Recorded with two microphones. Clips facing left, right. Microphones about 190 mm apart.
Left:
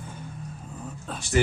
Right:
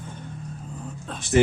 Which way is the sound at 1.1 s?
5° left (ahead or behind).